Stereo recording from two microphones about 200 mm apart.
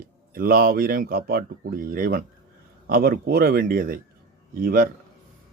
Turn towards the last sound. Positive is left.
turn(degrees=-50)  # may be behind; listen again after turning